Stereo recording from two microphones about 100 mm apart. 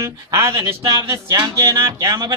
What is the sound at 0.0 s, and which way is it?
A man's voice, 35° right (ahead or behind).